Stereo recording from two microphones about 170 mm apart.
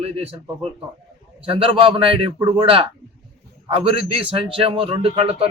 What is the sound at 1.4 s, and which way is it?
A man's voice, 35° right (ahead or behind).